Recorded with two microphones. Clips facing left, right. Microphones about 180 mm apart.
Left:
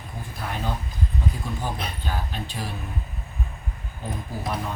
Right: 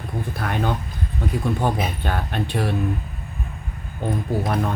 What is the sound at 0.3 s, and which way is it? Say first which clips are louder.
Speech: right 5 dB; 65° right (ahead or behind).